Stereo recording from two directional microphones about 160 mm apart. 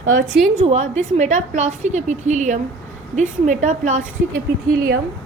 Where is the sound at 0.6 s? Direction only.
40° right (ahead or behind).